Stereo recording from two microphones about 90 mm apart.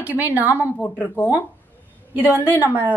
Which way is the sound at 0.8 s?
25° left (ahead or behind).